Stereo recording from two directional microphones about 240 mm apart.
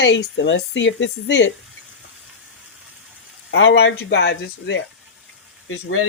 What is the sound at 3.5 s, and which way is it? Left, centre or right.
A woman's voice, left.